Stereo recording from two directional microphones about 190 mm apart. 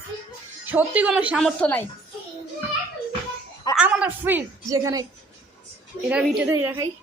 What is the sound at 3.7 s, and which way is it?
A woman's voice, 5° right (ahead or behind).